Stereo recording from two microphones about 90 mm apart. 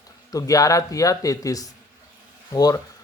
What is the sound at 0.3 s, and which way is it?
Speech, 40° left (ahead or behind).